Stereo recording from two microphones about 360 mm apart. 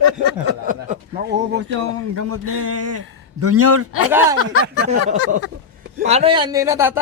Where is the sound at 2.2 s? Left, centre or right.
Right.